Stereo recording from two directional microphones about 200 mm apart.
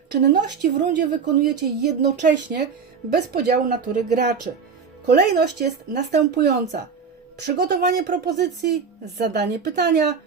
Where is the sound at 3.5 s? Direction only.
40° right (ahead or behind).